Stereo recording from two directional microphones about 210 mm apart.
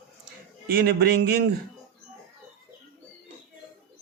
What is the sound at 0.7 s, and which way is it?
Speech, 50° right (ahead or behind).